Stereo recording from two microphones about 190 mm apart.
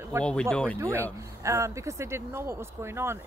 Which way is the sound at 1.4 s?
15° right (ahead or behind).